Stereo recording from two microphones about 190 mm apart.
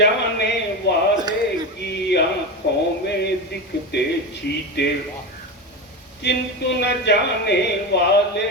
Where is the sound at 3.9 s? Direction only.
60° left (ahead or behind).